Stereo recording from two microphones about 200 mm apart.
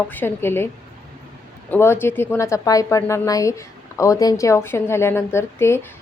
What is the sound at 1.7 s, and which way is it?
A woman's voice, 10° left (ahead or behind).